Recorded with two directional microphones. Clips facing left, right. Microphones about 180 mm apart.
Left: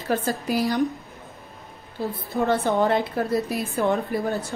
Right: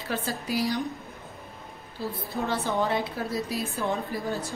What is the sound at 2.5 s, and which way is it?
A woman's voice, 55° left (ahead or behind).